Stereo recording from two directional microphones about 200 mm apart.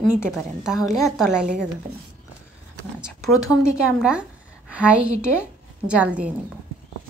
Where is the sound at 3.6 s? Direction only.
5° right (ahead or behind).